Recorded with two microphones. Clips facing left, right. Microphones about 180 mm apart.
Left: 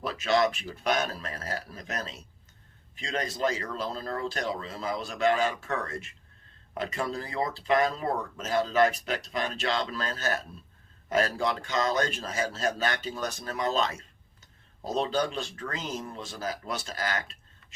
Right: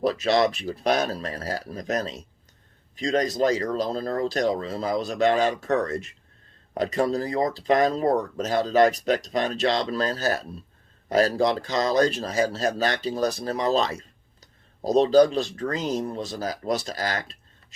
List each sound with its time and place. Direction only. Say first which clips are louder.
0.0 s speech: right 5 dB; 35° right (ahead or behind)